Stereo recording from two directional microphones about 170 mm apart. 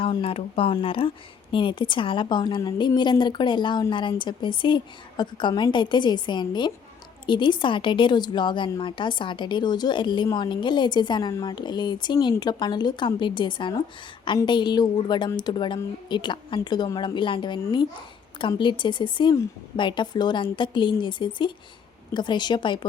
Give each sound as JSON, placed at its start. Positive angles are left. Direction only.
{"t": 0.0, "sound": "speech", "side_deg": 35}